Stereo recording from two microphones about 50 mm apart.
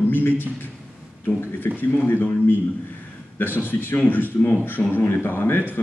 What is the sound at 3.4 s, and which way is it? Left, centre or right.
A man's voice, left.